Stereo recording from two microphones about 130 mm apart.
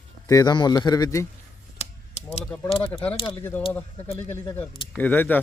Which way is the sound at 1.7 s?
60° left (ahead or behind).